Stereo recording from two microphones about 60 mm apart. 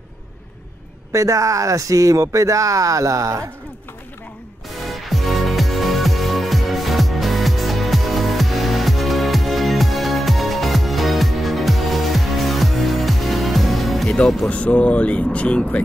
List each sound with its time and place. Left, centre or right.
1.1 s speech: right
4.8 s music: centre
14.0 s speech: centre
14.5 s speech: left